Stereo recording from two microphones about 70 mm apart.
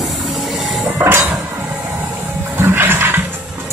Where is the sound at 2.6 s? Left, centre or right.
Right.